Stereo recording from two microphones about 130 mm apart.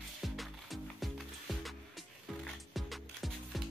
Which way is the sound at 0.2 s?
Centre (ahead or behind).